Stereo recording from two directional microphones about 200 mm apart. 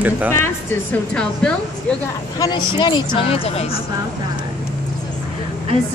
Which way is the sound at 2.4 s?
20° left (ahead or behind).